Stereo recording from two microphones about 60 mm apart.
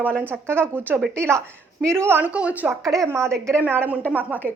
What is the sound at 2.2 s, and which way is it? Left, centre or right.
Speech, right.